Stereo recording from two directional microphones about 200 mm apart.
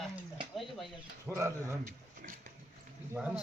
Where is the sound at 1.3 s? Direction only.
15° right (ahead or behind).